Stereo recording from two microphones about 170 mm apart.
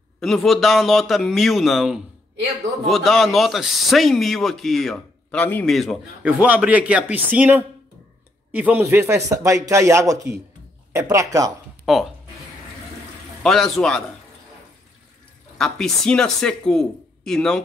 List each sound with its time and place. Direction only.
0.2 s a man's voice: centre (ahead or behind)
5.7 s a man's voice: centre (ahead or behind); by 11.5 s 20° right (ahead or behind)
11.8 s speech: centre (ahead or behind)
13.4 s a man's voice: centre (ahead or behind)
15.5 s a man's voice: centre (ahead or behind)